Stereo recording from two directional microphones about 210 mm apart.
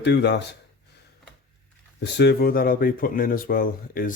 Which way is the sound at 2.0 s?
55° left (ahead or behind).